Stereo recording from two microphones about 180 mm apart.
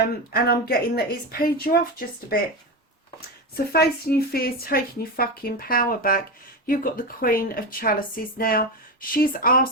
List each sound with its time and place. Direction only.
0.3 s speech: 60° left (ahead or behind)
3.7 s speech: 60° left (ahead or behind)